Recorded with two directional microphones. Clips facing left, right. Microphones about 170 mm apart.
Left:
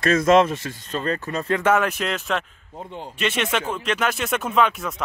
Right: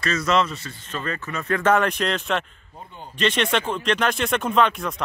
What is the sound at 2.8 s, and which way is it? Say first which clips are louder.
Speech: left 6 dB; 90° left.